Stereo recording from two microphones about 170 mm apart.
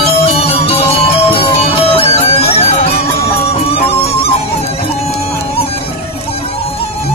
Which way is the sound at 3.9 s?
35° left (ahead or behind).